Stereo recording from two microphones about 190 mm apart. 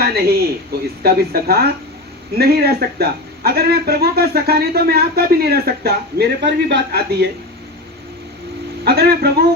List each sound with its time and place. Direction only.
0.0 s a man's voice: 55° right (ahead or behind)
8.8 s speech: 55° right (ahead or behind)